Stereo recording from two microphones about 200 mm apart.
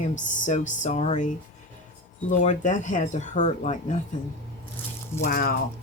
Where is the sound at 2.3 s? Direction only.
35° left (ahead or behind).